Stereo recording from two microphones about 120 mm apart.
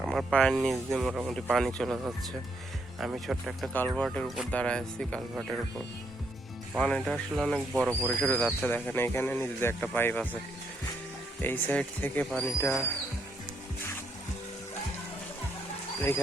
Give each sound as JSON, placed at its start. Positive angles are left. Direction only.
{"t": 0.0, "sound": "speech", "side_deg": 0}
{"t": 1.5, "sound": "speech", "side_deg": 5}
{"t": 6.7, "sound": "speech", "side_deg": 5}
{"t": 11.4, "sound": "speech", "side_deg": 15}
{"t": 16.0, "sound": "speech", "side_deg": 15}